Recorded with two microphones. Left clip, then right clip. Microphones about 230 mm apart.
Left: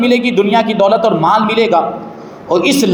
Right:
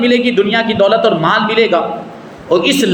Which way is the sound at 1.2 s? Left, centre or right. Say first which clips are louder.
Left 1 dB; left.